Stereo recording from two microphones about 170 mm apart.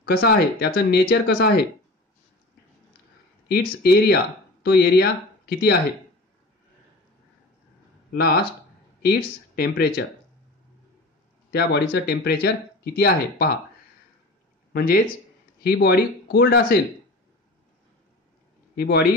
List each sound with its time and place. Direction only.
0.0 s speech: 65° left (ahead or behind)
3.4 s speech: 65° left (ahead or behind)
8.1 s speech: 65° left (ahead or behind)
11.5 s speech: 70° left (ahead or behind)
14.7 s speech: 60° left (ahead or behind)
18.8 s speech: 65° left (ahead or behind)